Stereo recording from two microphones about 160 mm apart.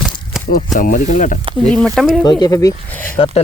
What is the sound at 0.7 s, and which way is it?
Speech, 60° left (ahead or behind).